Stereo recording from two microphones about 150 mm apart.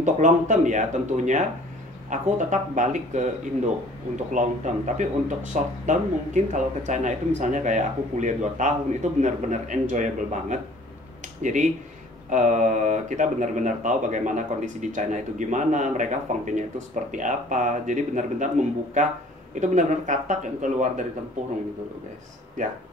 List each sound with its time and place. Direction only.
0.0 s speech: 55° right (ahead or behind)
4.3 s speech: 55° right (ahead or behind)